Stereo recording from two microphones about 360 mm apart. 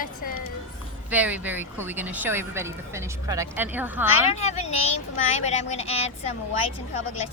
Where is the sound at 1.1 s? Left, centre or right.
Centre.